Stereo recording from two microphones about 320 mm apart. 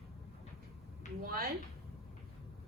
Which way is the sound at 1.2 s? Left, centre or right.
Right.